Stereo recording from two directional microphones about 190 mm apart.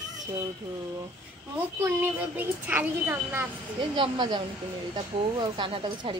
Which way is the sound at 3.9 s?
25° right (ahead or behind).